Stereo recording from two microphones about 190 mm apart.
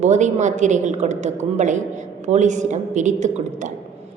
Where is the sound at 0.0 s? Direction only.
40° right (ahead or behind).